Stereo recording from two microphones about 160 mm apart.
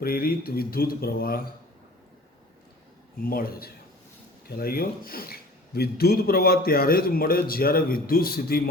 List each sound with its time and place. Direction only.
0.0 s speech: 65° left (ahead or behind)
3.2 s a man's voice: 65° left (ahead or behind)